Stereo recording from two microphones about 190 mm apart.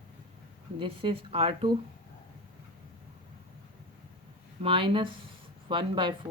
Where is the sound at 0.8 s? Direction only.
25° right (ahead or behind).